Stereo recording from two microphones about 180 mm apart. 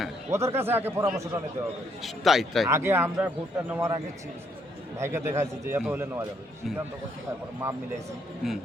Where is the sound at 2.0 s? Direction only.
Centre (ahead or behind).